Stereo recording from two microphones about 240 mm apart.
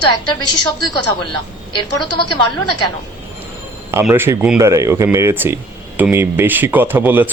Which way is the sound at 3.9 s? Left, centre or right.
Centre.